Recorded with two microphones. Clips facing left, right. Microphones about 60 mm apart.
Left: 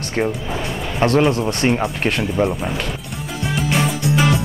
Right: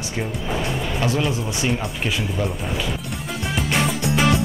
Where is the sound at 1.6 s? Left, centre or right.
Left.